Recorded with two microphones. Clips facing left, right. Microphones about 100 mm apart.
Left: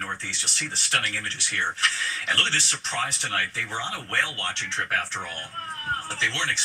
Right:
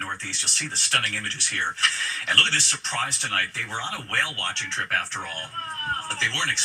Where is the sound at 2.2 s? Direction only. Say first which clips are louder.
Right 2 dB; 15° left (ahead or behind).